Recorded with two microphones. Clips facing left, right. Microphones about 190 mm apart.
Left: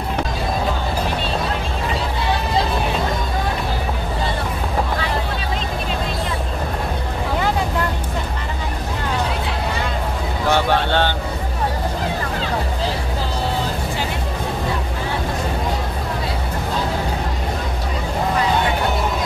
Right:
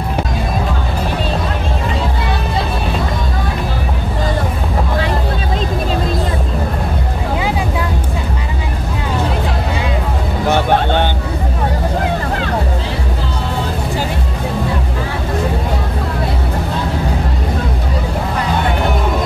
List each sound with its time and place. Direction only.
10.5 s vehicle: 15° right (ahead or behind)